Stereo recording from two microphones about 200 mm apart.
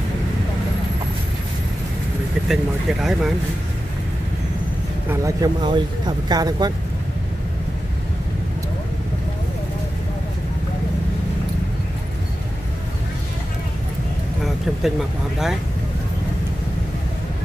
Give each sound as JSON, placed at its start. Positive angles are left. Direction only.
{"t": 2.4, "sound": "speech", "side_deg": 0}
{"t": 5.1, "sound": "speech", "side_deg": -15}
{"t": 14.4, "sound": "speech", "side_deg": 0}